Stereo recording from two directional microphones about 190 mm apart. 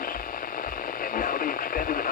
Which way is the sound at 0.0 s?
50° left (ahead or behind).